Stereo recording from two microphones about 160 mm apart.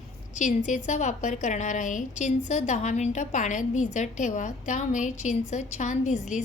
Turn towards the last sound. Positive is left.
turn(degrees=50)  # may be behind; listen again after turning